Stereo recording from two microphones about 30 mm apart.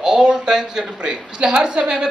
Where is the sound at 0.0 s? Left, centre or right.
Right.